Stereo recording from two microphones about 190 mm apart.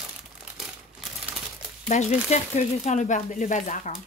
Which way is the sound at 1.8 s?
35° left (ahead or behind).